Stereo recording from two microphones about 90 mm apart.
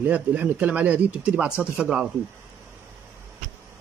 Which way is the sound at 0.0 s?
15° right (ahead or behind).